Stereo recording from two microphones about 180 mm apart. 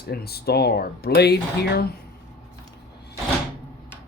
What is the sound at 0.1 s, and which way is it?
Speech, 60° left (ahead or behind).